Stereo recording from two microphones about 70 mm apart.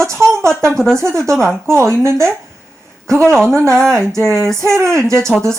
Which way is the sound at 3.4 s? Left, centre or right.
Right.